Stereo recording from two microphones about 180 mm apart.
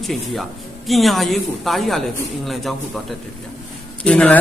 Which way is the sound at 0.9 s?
Centre (ahead or behind).